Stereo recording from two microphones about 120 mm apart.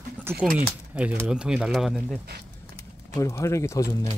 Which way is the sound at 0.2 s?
20° right (ahead or behind).